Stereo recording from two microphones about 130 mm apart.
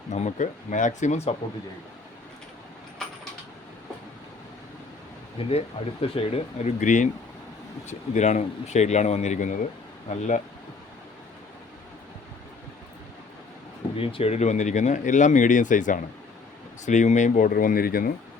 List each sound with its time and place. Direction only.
0.1 s speech: 60° left (ahead or behind)
5.4 s speech: 50° left (ahead or behind); by 10.4 s 65° left (ahead or behind)
13.9 s speech: 45° left (ahead or behind); by 18.1 s 90° left